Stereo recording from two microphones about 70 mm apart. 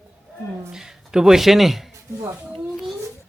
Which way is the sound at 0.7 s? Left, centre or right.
Centre.